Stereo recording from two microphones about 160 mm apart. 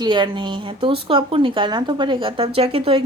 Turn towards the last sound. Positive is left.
turn(degrees=-35)  # may be behind; listen again after turning